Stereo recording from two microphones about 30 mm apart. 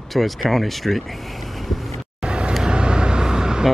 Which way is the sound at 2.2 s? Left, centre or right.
Right.